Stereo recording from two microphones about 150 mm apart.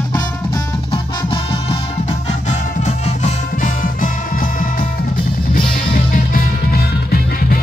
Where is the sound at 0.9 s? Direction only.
35° left (ahead or behind).